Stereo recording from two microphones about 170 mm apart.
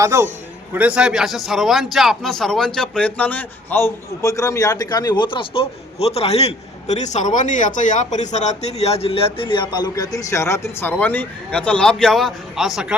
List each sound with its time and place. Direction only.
0.0 s a man's voice: 15° right (ahead or behind)